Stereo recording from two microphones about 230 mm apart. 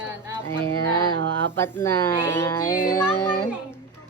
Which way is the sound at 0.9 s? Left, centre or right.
Centre.